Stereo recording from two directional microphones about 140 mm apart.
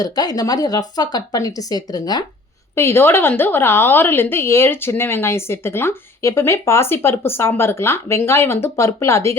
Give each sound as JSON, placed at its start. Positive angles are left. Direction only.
{"t": 0.0, "sound": "speech", "side_deg": 30}
{"t": 2.7, "sound": "speech", "side_deg": 15}